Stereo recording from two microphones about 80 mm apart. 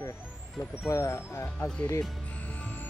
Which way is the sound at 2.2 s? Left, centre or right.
Centre.